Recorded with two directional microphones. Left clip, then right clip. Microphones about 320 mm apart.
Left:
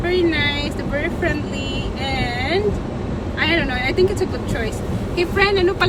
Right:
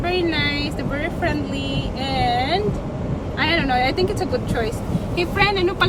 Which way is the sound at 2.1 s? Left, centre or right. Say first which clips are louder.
Right 3 dB; centre.